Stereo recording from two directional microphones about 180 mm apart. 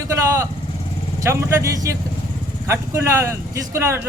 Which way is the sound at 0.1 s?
15° right (ahead or behind).